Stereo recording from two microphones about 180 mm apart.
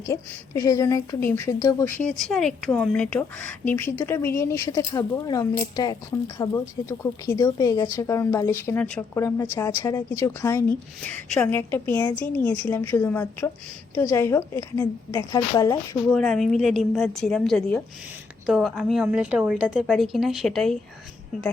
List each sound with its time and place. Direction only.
0.0 s a woman's voice: 15° left (ahead or behind)
2.0 s a woman's voice: centre (ahead or behind); by 16.0 s 20° left (ahead or behind)
16.1 s a woman's voice: centre (ahead or behind)